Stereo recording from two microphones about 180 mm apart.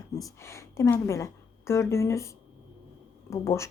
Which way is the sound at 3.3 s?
15° left (ahead or behind).